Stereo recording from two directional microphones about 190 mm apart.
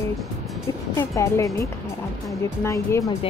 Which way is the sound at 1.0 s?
15° left (ahead or behind).